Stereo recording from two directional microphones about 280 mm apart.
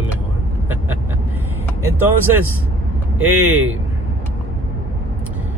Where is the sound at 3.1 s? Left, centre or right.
Right.